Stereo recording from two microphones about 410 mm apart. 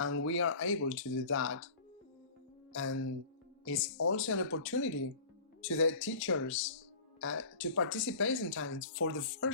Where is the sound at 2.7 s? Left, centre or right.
Left.